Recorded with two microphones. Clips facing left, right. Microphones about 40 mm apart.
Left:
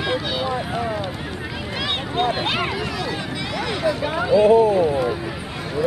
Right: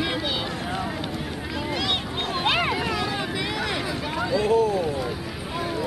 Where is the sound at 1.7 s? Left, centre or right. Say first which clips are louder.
Left 4 dB; centre.